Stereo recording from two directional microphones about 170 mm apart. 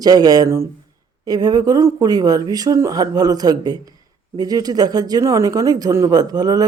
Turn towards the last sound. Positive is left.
turn(degrees=-20)  # may be behind; listen again after turning